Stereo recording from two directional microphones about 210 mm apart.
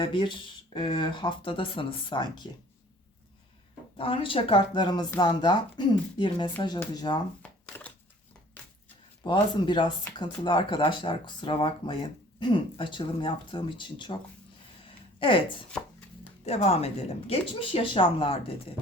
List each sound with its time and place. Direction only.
0.0 s speech: 25° left (ahead or behind)
3.9 s speech: 25° left (ahead or behind)
7.4 s shuffling cards: 5° left (ahead or behind)
9.2 s speech: 20° left (ahead or behind)
15.2 s speech: 25° left (ahead or behind)